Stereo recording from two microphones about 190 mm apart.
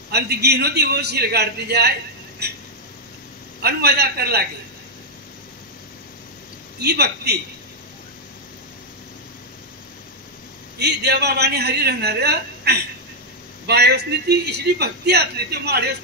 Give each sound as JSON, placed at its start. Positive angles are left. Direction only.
{"t": 0.1, "sound": "a man's voice", "side_deg": -60}
{"t": 2.4, "sound": "a sound", "side_deg": -55}
{"t": 3.6, "sound": "a man's voice", "side_deg": -55}
{"t": 6.8, "sound": "a man's voice", "side_deg": -60}
{"t": 10.8, "sound": "a man's voice", "side_deg": -60}